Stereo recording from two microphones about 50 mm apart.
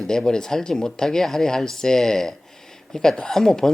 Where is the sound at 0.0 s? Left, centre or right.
Centre.